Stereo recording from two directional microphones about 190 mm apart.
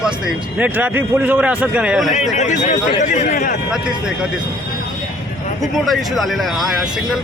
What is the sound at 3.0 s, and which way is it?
Speech, 40° left (ahead or behind).